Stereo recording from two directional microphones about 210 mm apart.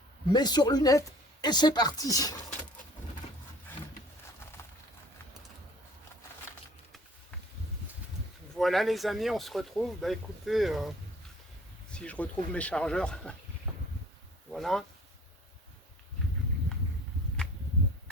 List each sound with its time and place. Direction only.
0.3 s speech: 20° left (ahead or behind)
8.5 s speech: centre (ahead or behind)
14.5 s speech: centre (ahead or behind)